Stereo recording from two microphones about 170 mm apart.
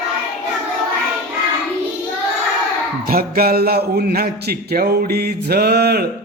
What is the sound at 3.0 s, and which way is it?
A man's voice, 60° right (ahead or behind).